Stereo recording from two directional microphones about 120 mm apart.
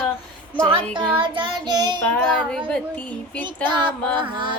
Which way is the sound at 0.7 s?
45° right (ahead or behind).